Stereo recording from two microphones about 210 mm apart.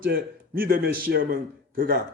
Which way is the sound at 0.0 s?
45° right (ahead or behind).